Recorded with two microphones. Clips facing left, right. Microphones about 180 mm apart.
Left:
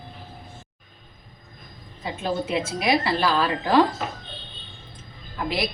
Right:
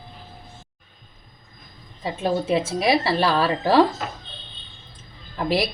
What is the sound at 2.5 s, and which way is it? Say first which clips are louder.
A woman's voice: right 2 dB; 30° right (ahead or behind).